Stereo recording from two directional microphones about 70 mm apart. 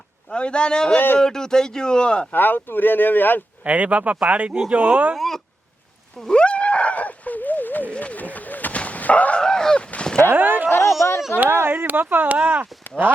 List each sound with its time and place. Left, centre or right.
0.3 s speech: centre
0.9 s speech: left
1.2 s speech: centre
2.3 s speech: left
3.6 s speech: centre
5.1 s speech: centre
6.1 s a sound: centre
10.3 s speech: right
10.7 s a sound: left
11.3 s speech: right